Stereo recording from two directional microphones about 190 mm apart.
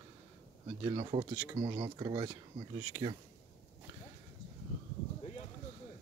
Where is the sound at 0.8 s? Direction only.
25° right (ahead or behind).